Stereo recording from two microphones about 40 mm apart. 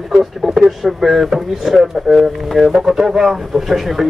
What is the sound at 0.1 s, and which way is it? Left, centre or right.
A man's voice, centre.